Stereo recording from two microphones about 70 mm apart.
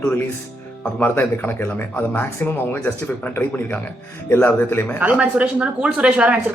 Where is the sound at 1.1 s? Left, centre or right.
Left.